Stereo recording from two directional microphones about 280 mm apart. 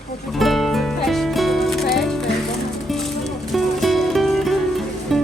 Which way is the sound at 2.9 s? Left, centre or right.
Centre.